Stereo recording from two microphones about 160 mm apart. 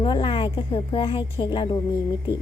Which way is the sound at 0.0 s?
35° left (ahead or behind).